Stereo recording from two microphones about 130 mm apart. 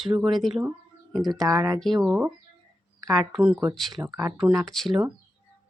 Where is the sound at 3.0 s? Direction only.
25° right (ahead or behind).